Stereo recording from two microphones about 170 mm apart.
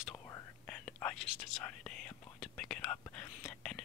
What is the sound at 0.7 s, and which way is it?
Whispering, 5° left (ahead or behind).